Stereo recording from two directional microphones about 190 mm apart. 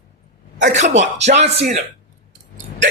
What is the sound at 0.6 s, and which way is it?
Speech, 40° right (ahead or behind).